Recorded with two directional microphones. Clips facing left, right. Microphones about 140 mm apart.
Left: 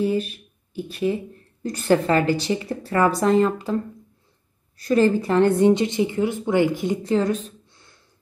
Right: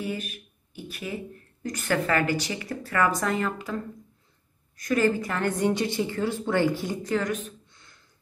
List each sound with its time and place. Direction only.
0.0 s a woman's voice: 30° left (ahead or behind)